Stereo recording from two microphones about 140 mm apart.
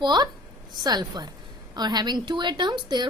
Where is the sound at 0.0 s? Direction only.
30° right (ahead or behind).